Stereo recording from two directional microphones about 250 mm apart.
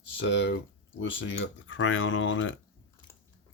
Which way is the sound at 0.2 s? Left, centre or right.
Left.